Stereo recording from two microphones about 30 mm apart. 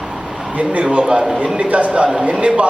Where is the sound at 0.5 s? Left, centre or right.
Right.